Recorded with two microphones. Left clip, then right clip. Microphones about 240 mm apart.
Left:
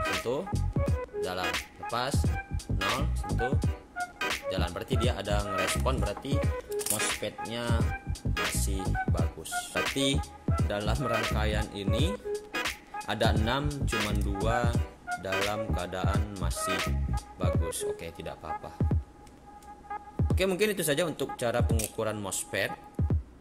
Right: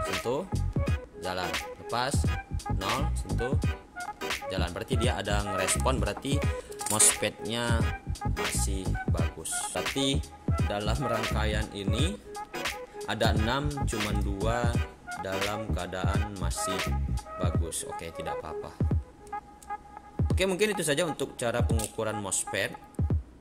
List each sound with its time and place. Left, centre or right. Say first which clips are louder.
0.1 s music: even; centre
5.4 s speech: even; centre
5.9 s speech: right 2 dB; centre
7.2 s speech: right 5 dB; right
7.5 s speech: right 1 dB; centre
7.8 s music: right 2 dB; centre
20.2 s speech: right 1 dB; centre